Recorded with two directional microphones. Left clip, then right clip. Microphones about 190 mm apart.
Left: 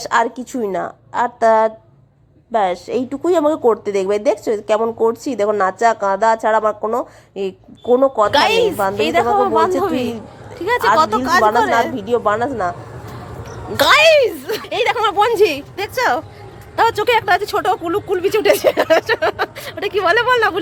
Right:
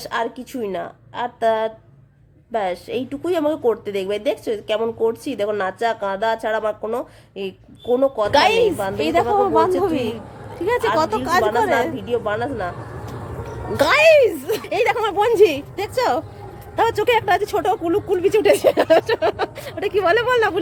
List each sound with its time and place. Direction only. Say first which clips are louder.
0.0 s a woman's voice: left 7 dB; 15° left (ahead or behind)
12.0 s a woman's voice: left 5 dB; 10° left (ahead or behind)
13.7 s speech: left 2 dB; 5° right (ahead or behind)